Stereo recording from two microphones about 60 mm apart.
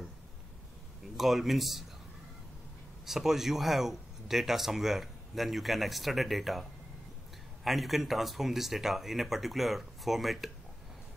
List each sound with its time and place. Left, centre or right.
1.1 s speech: centre
3.1 s speech: centre